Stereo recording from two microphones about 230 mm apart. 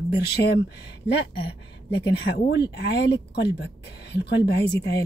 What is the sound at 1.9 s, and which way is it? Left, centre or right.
Speech, left.